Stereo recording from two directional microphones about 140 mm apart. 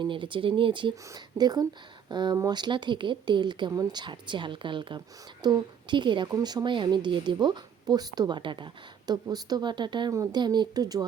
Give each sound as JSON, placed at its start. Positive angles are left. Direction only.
{"t": 0.0, "sound": "a woman's voice", "side_deg": -35}